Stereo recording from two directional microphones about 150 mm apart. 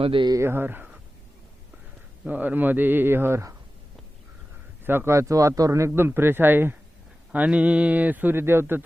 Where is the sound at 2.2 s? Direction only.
10° right (ahead or behind).